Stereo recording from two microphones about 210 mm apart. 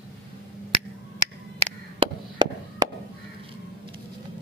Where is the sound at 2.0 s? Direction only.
20° right (ahead or behind).